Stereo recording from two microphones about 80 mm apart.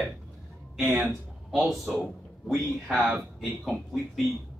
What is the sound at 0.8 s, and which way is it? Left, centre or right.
Speech, centre.